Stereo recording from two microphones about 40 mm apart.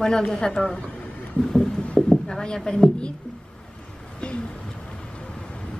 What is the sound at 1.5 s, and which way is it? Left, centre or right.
Music, centre.